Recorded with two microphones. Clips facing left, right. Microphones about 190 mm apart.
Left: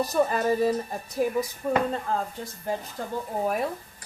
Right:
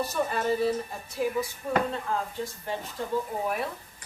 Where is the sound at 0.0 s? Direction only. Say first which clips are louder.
Left 4 dB; 40° left (ahead or behind).